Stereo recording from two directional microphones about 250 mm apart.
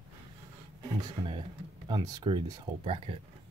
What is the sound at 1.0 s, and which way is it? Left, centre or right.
Speech, centre.